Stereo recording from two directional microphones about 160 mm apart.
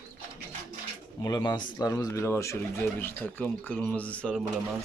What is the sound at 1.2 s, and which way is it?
Speech, 25° left (ahead or behind).